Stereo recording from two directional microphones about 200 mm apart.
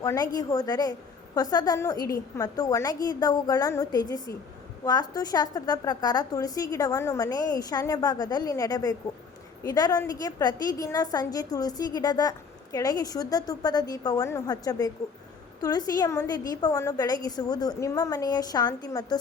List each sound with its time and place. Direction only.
0.0 s a woman's voice: 15° left (ahead or behind)